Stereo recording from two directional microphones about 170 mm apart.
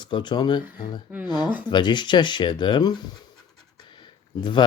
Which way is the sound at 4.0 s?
25° left (ahead or behind).